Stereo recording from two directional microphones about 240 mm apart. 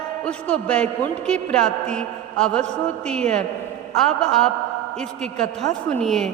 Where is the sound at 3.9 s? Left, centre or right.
Centre.